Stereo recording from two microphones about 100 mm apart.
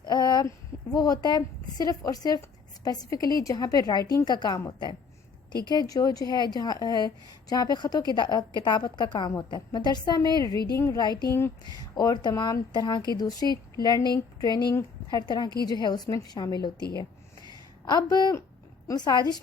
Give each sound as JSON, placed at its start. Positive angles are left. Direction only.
{"t": 0.0, "sound": "a sound", "side_deg": 45}
{"t": 0.9, "sound": "a woman's voice", "side_deg": 40}
{"t": 11.0, "sound": "a woman's voice", "side_deg": 45}
{"t": 11.3, "sound": "speech", "side_deg": 25}
{"t": 11.6, "sound": "a woman's voice", "side_deg": 40}